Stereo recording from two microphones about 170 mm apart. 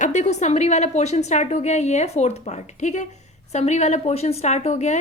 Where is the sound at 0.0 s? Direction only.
45° left (ahead or behind).